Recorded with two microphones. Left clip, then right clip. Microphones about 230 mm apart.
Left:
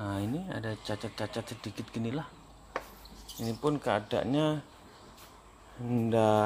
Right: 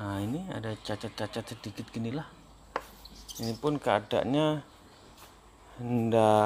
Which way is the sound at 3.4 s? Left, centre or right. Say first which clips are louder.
Even; centre.